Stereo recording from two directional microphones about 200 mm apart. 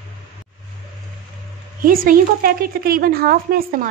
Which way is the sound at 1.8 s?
45° right (ahead or behind).